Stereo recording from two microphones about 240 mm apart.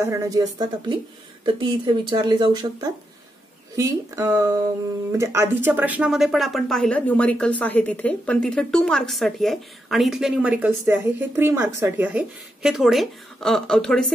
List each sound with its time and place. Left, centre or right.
0.0 s a woman's voice: centre